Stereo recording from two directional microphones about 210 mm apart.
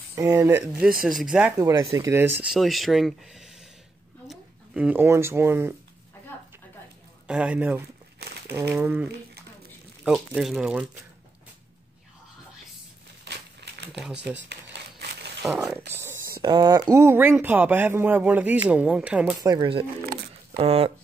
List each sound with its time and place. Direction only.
0.1 s speech: 15° right (ahead or behind)
7.2 s speech: 5° right (ahead or behind)
13.2 s typewriter: 55° right (ahead or behind)
13.9 s speech: 5° right (ahead or behind)
14.5 s a sound: 55° right (ahead or behind)
15.4 s speech: centre (ahead or behind)
19.4 s speech: 20° right (ahead or behind)
20.5 s speech: 30° right (ahead or behind)